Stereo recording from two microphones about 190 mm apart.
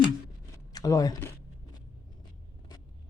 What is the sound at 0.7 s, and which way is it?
Speech, 20° left (ahead or behind).